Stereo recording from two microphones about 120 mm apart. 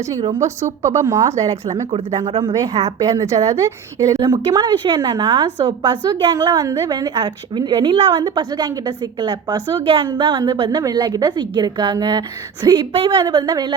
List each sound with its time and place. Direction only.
0.8 s a woman's voice: 25° right (ahead or behind)
12.9 s a woman's voice: 50° right (ahead or behind)
13.1 s a woman's voice: 35° right (ahead or behind)